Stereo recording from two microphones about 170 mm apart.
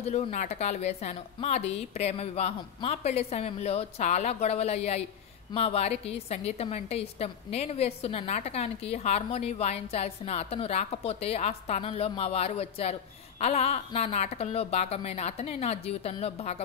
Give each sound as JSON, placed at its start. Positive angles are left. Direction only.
{"t": 0.0, "sound": "a woman's voice", "side_deg": 40}